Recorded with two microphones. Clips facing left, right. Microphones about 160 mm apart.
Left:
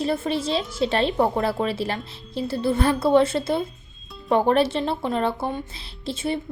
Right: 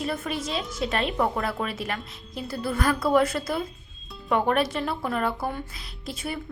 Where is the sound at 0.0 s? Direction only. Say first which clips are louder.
Left 6 dB; 30° left (ahead or behind).